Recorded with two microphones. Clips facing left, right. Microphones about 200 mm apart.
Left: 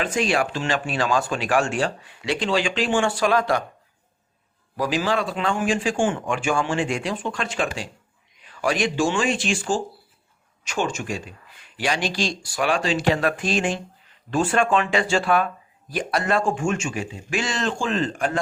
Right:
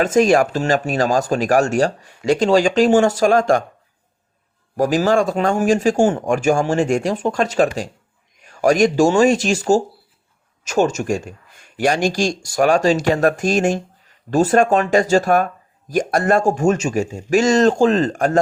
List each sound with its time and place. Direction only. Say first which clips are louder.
0.0 s speech: right 9 dB; 45° right (ahead or behind)
4.8 s speech: right 7 dB; 45° right (ahead or behind)